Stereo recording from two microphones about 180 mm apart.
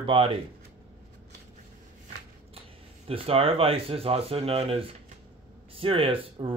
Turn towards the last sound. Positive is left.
turn(degrees=-30)  # may be behind; listen again after turning